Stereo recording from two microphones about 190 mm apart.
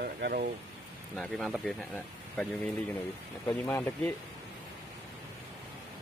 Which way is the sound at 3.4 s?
15° left (ahead or behind).